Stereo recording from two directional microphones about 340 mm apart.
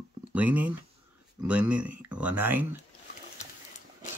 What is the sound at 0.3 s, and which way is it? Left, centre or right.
Speech, centre.